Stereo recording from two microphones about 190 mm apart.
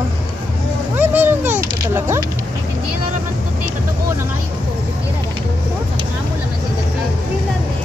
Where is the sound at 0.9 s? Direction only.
10° right (ahead or behind).